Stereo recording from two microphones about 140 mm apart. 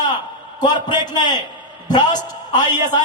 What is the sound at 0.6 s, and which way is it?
Speech, 30° left (ahead or behind).